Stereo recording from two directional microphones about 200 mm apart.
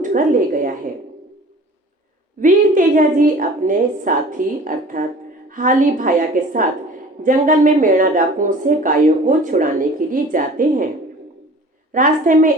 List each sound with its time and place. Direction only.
0.0 s a woman's voice: 40° right (ahead or behind)
2.4 s a woman's voice: 40° right (ahead or behind)
11.9 s speech: 40° right (ahead or behind)